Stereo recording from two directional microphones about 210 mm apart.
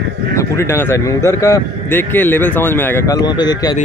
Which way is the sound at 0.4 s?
15° left (ahead or behind).